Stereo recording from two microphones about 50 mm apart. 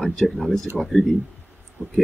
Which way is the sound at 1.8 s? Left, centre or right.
Right.